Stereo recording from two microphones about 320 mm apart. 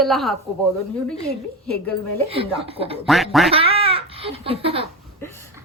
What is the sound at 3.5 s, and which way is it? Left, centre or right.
Speech, centre.